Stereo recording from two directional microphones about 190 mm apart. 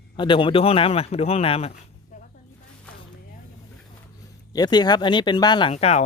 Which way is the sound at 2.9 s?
5° left (ahead or behind).